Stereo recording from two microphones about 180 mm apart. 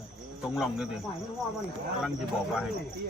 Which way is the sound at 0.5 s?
Centre (ahead or behind).